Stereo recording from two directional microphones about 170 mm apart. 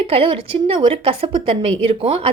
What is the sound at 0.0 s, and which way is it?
A woman's voice, 35° right (ahead or behind).